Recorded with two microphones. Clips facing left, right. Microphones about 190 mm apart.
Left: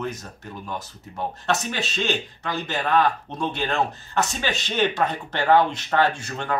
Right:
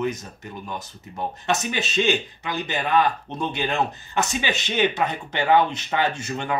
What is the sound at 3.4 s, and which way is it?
Speech, 15° right (ahead or behind).